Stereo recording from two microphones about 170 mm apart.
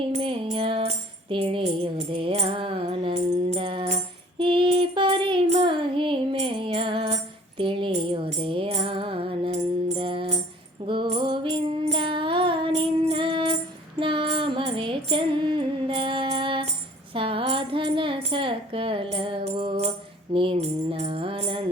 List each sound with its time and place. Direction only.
0.1 s music: 30° right (ahead or behind)
17.2 s tambourine: 30° right (ahead or behind)
19.1 s music: 30° right (ahead or behind)